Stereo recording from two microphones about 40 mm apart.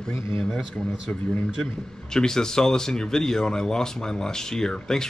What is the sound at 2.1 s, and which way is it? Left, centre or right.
Speech, centre.